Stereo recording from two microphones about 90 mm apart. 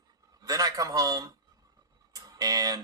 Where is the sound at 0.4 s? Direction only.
40° right (ahead or behind).